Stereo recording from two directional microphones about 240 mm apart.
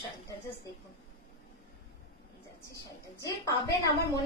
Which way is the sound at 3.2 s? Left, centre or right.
Centre.